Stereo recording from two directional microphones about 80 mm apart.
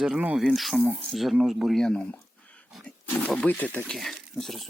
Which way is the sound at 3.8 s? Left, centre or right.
Centre.